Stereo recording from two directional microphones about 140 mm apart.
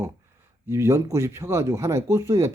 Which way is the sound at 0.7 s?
20° right (ahead or behind).